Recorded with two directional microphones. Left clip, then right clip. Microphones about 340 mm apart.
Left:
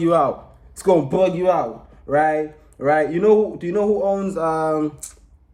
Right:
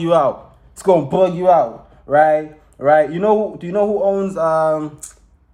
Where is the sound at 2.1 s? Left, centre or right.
Centre.